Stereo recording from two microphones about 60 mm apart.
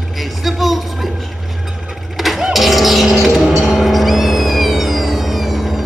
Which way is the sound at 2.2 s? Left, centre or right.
Centre.